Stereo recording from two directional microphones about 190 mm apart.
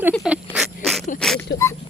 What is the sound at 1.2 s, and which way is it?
Speech, 5° left (ahead or behind).